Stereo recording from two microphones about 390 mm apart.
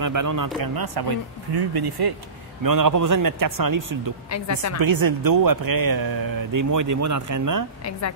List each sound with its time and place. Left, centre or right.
0.0 s a man's voice: right
0.6 s speech: right
2.6 s a man's voice: right
4.3 s speech: left
4.7 s speech: right